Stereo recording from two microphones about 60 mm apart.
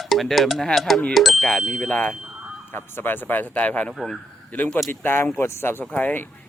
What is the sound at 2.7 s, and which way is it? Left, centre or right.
Speech, left.